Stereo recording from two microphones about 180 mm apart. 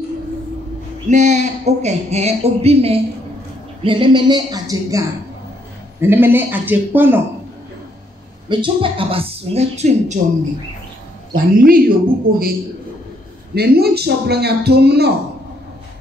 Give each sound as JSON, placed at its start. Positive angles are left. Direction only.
{"t": 1.0, "sound": "a woman's voice", "side_deg": -40}
{"t": 8.5, "sound": "speech", "side_deg": -25}
{"t": 11.6, "sound": "speech", "side_deg": -55}
{"t": 13.6, "sound": "speech", "side_deg": -60}